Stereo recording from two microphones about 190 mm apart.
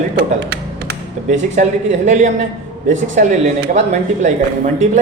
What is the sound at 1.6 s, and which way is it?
Speech, 40° right (ahead or behind).